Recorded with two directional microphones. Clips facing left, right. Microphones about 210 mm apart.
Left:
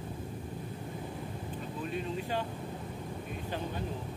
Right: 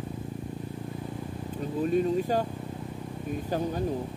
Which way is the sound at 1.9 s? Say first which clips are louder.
Right 10 dB; 40° right (ahead or behind).